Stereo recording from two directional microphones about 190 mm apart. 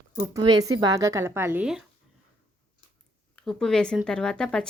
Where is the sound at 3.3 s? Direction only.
Centre (ahead or behind).